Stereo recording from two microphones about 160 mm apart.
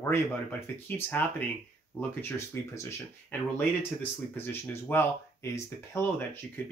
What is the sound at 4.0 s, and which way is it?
Speech, 15° left (ahead or behind).